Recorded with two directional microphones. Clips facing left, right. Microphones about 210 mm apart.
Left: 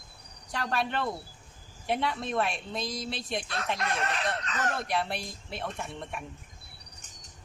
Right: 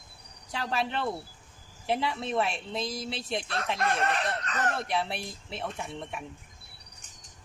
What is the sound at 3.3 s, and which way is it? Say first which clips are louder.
Speech: right 2 dB; 30° right (ahead or behind).